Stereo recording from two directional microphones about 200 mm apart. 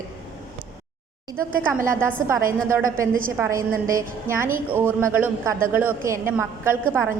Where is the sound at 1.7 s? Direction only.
10° right (ahead or behind).